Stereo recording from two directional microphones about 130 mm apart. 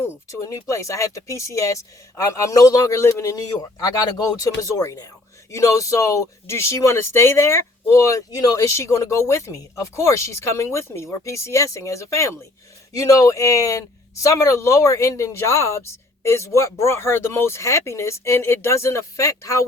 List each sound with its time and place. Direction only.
0.0 s speech: 20° left (ahead or behind)